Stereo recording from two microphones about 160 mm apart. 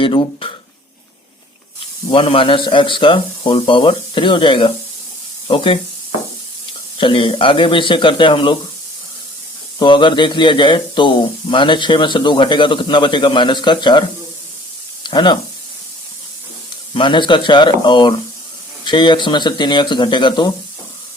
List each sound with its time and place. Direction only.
0.0 s speech: 30° left (ahead or behind)
2.0 s speech: 35° left (ahead or behind)
7.0 s speech: 35° left (ahead or behind)
9.7 s speech: 30° left (ahead or behind)
15.0 s speech: 30° left (ahead or behind)
16.9 s speech: 30° left (ahead or behind)